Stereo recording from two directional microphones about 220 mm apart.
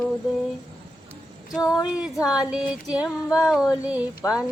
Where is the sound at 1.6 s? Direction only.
15° left (ahead or behind).